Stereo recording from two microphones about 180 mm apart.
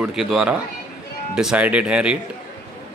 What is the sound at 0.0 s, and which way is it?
Speech, 5° right (ahead or behind).